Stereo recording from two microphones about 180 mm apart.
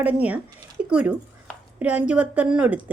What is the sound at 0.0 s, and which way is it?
Speech, 10° right (ahead or behind).